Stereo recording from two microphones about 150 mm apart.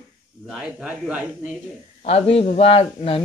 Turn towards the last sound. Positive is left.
turn(degrees=40)  # may be behind; listen again after turning